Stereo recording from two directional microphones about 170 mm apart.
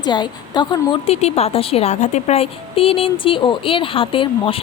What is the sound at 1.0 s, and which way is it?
A woman's voice, 40° left (ahead or behind).